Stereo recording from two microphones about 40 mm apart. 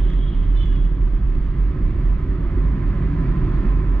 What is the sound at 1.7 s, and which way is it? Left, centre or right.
Vehicle, left.